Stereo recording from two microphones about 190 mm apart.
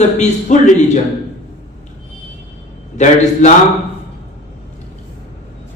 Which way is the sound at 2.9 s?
40° left (ahead or behind).